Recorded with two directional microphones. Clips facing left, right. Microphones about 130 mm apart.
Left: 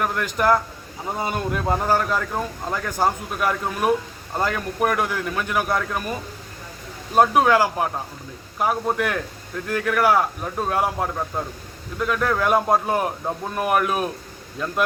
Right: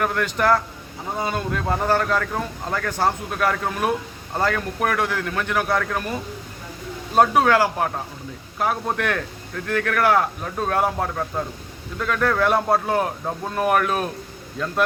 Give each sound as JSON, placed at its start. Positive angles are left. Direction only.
{"t": 0.3, "sound": "speech", "side_deg": 10}
{"t": 7.2, "sound": "speech", "side_deg": 10}